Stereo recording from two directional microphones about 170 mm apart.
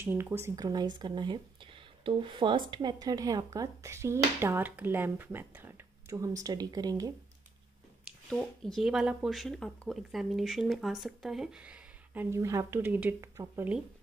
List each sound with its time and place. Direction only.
0.0 s speech: 15° right (ahead or behind)
8.3 s speech: 5° left (ahead or behind); by 13.7 s 15° right (ahead or behind)